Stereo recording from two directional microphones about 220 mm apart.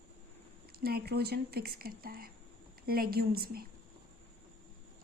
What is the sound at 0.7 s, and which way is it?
A woman's voice, 45° right (ahead or behind).